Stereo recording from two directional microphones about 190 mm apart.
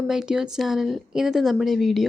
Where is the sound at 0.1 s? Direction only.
5° right (ahead or behind).